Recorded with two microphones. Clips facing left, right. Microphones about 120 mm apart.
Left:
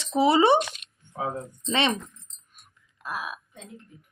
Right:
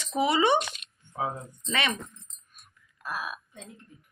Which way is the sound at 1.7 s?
25° left (ahead or behind).